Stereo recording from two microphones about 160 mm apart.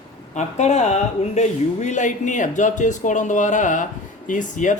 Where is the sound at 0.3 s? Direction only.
45° left (ahead or behind).